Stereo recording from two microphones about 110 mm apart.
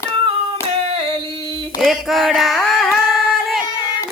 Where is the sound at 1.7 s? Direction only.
Centre (ahead or behind).